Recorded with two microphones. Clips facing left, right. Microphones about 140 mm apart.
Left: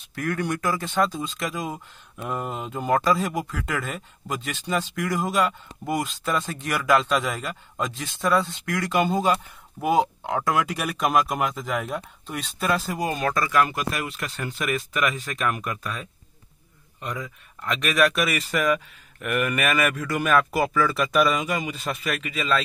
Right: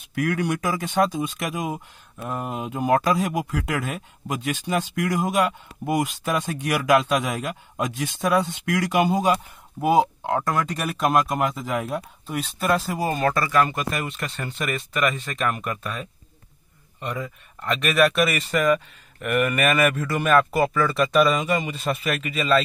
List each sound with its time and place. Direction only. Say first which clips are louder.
0.0 s speech: right 3 dB; 10° right (ahead or behind)
1.7 s speech: right 3 dB; 5° right (ahead or behind)